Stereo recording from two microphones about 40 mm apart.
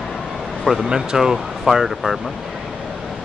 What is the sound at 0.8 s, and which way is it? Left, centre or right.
Speech, centre.